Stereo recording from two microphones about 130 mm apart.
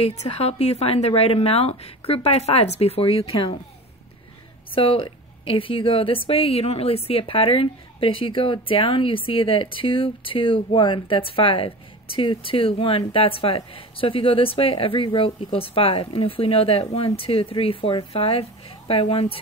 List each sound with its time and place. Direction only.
0.0 s a woman's voice: 55° left (ahead or behind)
4.7 s a woman's voice: 45° left (ahead or behind)